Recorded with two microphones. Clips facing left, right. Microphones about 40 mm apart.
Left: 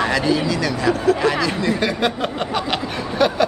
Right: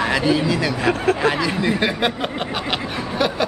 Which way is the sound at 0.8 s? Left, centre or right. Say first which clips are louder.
Left 2 dB; right.